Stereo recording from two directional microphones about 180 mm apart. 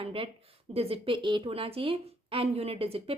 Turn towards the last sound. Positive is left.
turn(degrees=-30)  # may be behind; listen again after turning